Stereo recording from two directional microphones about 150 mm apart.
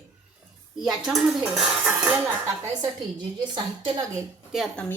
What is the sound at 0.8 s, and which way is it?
Speech, centre (ahead or behind).